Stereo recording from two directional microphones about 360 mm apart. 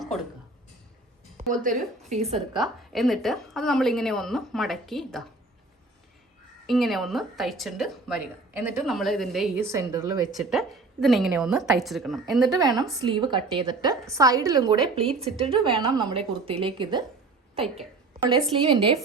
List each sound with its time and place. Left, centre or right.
0.0 s a sound: centre
1.4 s a woman's voice: right
2.6 s a woman's voice: centre
6.7 s a woman's voice: centre
18.2 s a woman's voice: centre